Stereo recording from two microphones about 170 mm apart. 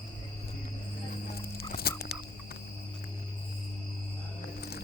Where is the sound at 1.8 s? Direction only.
65° left (ahead or behind).